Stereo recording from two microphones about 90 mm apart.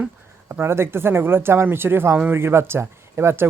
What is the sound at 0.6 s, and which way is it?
Speech, 25° right (ahead or behind).